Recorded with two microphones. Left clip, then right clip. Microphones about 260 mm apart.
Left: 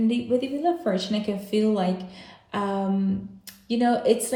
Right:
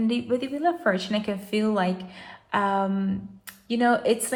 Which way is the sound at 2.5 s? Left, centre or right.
Centre.